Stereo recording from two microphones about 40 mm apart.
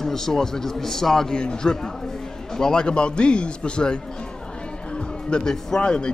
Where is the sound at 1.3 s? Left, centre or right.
Left.